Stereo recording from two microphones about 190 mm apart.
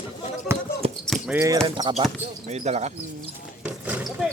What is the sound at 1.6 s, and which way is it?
Speech, 25° right (ahead or behind).